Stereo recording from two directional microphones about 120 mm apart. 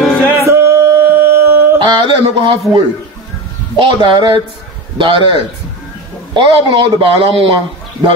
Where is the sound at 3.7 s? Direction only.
40° right (ahead or behind).